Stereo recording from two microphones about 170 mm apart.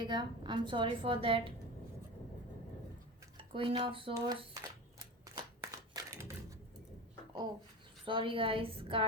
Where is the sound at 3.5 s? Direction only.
30° right (ahead or behind).